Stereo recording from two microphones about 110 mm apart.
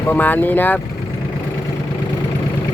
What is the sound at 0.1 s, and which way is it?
Speech, 15° left (ahead or behind).